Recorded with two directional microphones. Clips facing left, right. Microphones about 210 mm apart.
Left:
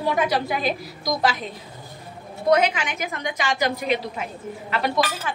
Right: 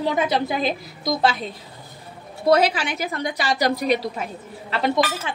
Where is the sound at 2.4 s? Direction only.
35° right (ahead or behind).